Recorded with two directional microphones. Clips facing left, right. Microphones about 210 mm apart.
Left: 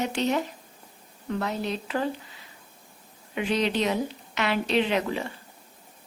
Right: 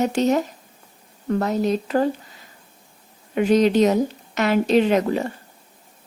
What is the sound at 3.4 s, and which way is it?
A woman's voice, 45° right (ahead or behind).